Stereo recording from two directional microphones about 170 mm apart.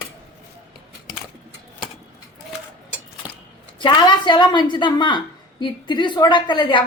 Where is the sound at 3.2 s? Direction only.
10° right (ahead or behind).